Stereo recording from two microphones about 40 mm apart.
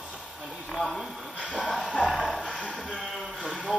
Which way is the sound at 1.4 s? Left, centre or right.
Left.